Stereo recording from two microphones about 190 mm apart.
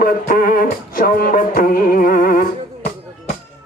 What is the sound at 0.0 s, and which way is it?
Music, 50° left (ahead or behind).